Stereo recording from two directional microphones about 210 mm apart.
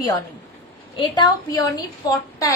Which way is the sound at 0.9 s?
20° left (ahead or behind).